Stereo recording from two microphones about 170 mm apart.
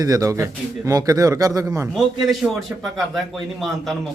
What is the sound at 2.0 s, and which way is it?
A man's voice, centre (ahead or behind).